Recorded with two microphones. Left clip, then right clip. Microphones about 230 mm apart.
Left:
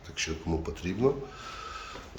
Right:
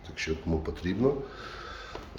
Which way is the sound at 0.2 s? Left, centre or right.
Centre.